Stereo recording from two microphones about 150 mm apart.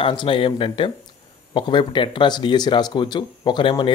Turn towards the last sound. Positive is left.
turn(degrees=35)  # may be behind; listen again after turning